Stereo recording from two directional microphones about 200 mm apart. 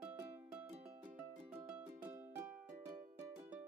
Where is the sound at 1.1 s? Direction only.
10° right (ahead or behind).